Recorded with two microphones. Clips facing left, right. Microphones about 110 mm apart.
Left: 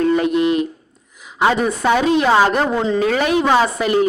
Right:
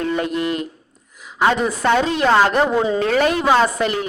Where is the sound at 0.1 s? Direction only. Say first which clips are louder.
Left 5 dB; 20° left (ahead or behind).